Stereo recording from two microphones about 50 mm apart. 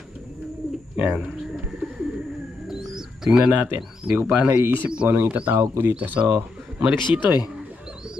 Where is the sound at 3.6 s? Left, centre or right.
Right.